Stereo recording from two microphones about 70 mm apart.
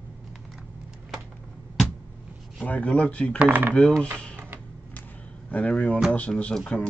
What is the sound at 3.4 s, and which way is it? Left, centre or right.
Speech, right.